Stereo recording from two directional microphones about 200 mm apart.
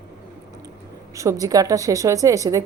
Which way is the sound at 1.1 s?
15° right (ahead or behind).